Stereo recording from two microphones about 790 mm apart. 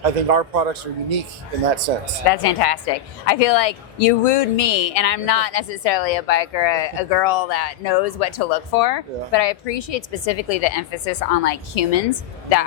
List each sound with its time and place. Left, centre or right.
0.0 s speech: right
2.2 s a woman's voice: left